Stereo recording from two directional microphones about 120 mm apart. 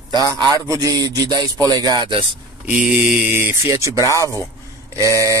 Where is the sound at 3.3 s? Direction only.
20° right (ahead or behind).